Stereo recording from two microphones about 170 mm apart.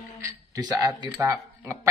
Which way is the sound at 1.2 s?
15° right (ahead or behind).